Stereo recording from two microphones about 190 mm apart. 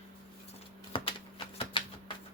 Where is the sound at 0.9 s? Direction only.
30° left (ahead or behind).